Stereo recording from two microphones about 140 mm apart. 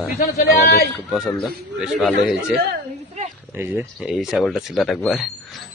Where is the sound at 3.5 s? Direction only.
15° right (ahead or behind).